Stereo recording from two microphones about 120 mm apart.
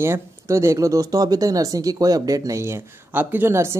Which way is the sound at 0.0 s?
20° right (ahead or behind).